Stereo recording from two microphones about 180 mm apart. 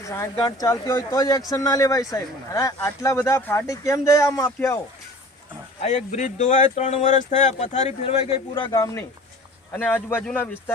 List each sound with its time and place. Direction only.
0.0 s speech: 15° left (ahead or behind)
5.8 s speech: 40° left (ahead or behind); by 10.6 s 10° left (ahead or behind)